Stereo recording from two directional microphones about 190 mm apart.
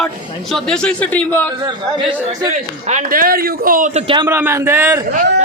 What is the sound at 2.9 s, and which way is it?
A man's voice, 50° right (ahead or behind).